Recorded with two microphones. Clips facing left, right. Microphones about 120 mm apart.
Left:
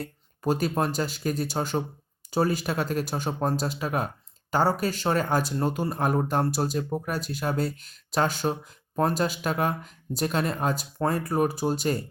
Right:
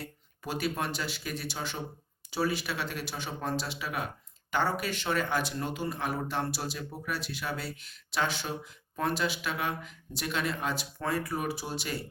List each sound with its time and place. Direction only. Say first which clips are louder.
0.0 s speech: left 11 dB; 40° left (ahead or behind)